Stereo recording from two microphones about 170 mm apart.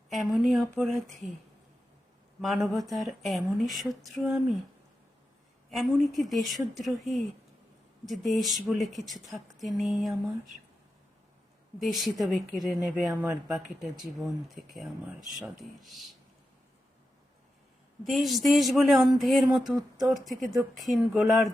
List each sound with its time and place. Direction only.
0.1 s speech: centre (ahead or behind)
2.4 s speech: centre (ahead or behind)
5.7 s speech: centre (ahead or behind)
11.8 s speech: centre (ahead or behind)
18.0 s speech: centre (ahead or behind)